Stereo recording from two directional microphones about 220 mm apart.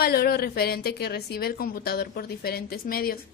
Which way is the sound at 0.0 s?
45° left (ahead or behind).